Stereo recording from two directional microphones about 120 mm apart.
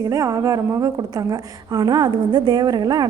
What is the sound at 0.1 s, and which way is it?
A woman's voice, 30° right (ahead or behind).